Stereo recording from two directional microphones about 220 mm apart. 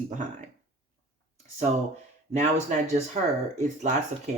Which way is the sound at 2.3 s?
30° right (ahead or behind).